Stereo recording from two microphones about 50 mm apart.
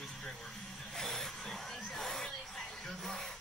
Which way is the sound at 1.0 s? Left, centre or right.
Centre.